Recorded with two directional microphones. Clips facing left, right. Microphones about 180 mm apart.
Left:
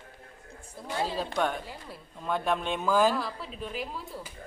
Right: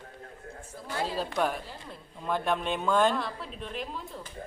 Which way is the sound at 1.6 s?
15° left (ahead or behind).